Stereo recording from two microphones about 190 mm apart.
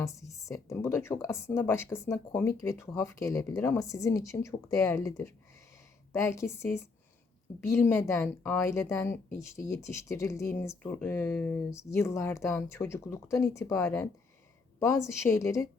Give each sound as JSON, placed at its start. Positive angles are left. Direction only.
{"t": 0.0, "sound": "speech", "side_deg": 15}